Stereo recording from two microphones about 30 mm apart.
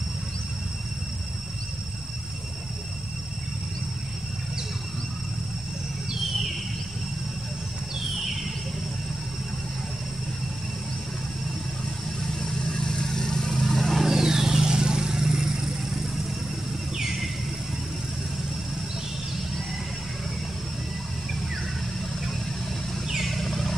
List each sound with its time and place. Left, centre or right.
12.4 s vehicle: centre
14.0 s vehicle: centre
23.2 s vehicle: centre